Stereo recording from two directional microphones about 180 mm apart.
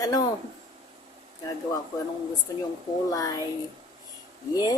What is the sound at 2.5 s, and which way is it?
Music, 20° left (ahead or behind).